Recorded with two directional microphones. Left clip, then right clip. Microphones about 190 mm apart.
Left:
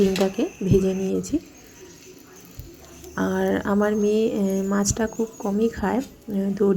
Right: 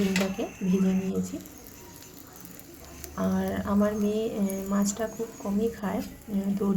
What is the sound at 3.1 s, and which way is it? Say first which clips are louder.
A woman's voice: left 7 dB; 30° left (ahead or behind).